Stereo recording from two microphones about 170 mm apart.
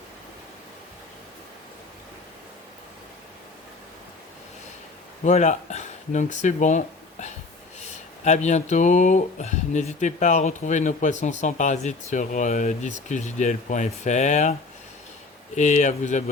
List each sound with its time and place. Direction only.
5.2 s speech: 45° left (ahead or behind)
15.5 s speech: 45° left (ahead or behind)